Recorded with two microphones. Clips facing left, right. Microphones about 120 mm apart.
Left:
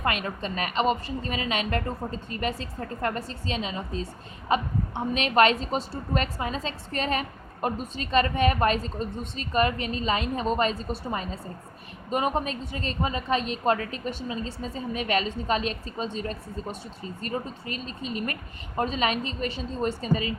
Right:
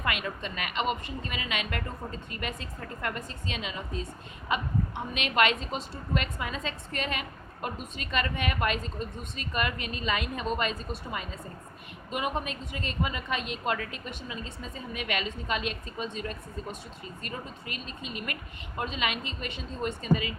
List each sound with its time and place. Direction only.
0.0 s a woman's voice: 35° left (ahead or behind)